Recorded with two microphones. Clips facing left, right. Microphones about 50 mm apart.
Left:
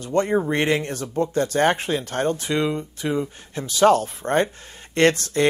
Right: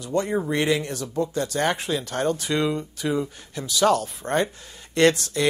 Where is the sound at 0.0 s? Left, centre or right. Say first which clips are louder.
Left 4 dB; left.